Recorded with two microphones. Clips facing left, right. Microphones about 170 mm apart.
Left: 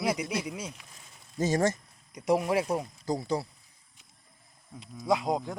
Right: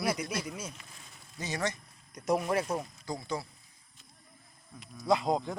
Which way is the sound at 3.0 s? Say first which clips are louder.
Left 6 dB; 40° left (ahead or behind).